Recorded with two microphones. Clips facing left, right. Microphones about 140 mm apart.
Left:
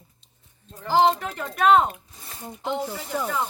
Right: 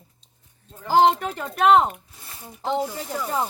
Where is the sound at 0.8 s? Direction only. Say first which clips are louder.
Right 2 dB; 45° right (ahead or behind).